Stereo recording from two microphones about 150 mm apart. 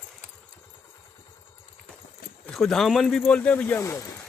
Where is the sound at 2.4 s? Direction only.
Centre (ahead or behind); by 4.2 s 20° left (ahead or behind).